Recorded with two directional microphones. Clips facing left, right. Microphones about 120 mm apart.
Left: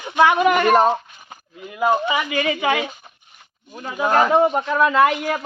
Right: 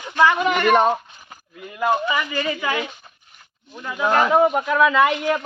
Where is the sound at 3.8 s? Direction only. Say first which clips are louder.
Left 2 dB; 45° left (ahead or behind).